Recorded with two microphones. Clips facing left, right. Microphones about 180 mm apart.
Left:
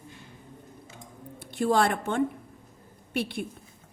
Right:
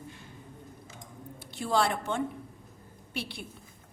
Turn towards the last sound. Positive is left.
turn(degrees=55)  # may be behind; listen again after turning